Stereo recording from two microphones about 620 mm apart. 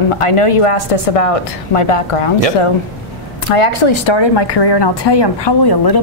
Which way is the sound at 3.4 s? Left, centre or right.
Left.